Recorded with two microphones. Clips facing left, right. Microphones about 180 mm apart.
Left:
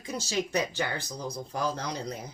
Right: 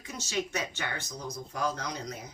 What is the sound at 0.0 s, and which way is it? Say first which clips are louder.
Speech: left 3 dB; 35° left (ahead or behind).